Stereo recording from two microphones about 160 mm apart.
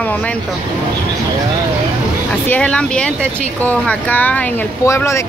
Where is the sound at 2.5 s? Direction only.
5° left (ahead or behind).